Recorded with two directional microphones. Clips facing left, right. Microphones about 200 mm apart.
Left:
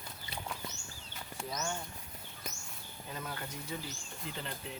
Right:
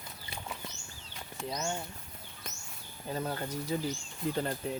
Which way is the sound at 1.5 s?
25° right (ahead or behind).